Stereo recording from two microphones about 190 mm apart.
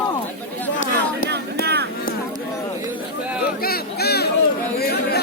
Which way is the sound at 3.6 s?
55° left (ahead or behind).